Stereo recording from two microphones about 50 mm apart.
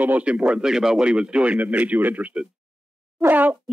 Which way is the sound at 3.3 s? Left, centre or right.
Right.